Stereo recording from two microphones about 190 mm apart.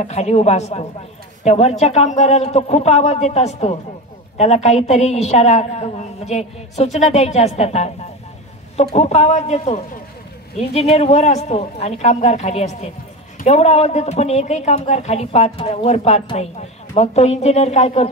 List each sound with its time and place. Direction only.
0.0 s a woman's voice: 35° left (ahead or behind)